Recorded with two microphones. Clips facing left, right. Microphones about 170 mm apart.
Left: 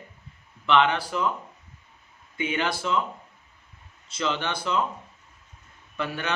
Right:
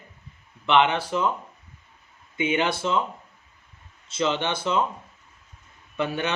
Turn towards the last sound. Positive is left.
turn(degrees=-20)  # may be behind; listen again after turning